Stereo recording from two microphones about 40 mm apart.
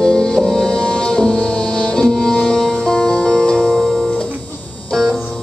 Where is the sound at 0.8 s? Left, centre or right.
Left.